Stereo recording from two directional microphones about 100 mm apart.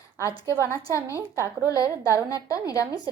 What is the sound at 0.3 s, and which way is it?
A woman's voice, 30° left (ahead or behind).